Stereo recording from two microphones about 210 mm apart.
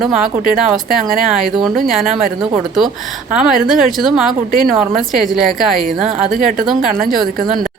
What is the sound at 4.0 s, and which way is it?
Speech, centre (ahead or behind).